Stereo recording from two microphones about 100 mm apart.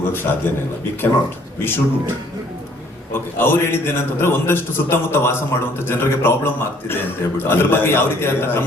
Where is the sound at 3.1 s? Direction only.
20° left (ahead or behind).